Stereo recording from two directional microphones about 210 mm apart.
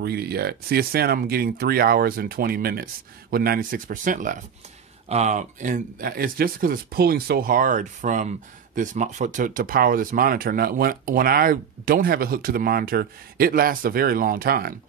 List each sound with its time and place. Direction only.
0.0 s speech: 50° right (ahead or behind)